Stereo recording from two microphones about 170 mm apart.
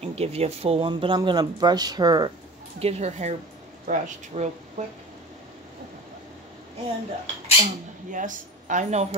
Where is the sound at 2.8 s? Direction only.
40° right (ahead or behind).